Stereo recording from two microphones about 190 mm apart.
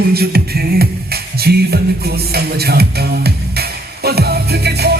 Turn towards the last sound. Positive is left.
turn(degrees=-60)  # may be behind; listen again after turning